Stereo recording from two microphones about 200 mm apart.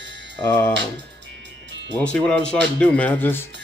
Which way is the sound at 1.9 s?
5° left (ahead or behind).